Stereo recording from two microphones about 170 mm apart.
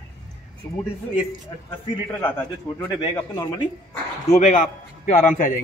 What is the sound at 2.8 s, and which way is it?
Speech, 15° left (ahead or behind).